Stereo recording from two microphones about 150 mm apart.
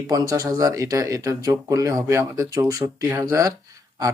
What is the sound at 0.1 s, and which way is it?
Speech, 25° right (ahead or behind).